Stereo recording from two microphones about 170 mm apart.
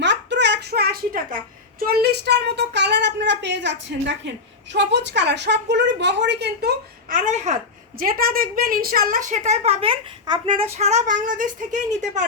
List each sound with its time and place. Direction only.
0.0 s a sound: 90° right; by 1.4 s 60° right (ahead or behind)
1.9 s a woman's voice: 70° right (ahead or behind)
7.1 s a woman's voice: 45° right (ahead or behind); by 10.5 s 30° right (ahead or behind)
10.6 s a woman's voice: 40° right (ahead or behind)